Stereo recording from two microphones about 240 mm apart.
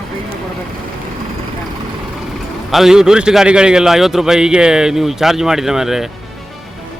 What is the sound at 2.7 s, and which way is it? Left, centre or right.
A man's voice, centre.